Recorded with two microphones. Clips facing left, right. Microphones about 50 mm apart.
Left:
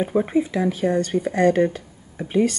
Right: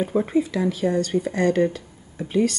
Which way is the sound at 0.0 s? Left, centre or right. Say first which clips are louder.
Left 1 dB; centre.